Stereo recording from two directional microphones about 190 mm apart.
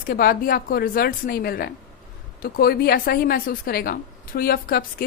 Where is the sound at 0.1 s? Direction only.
50° left (ahead or behind).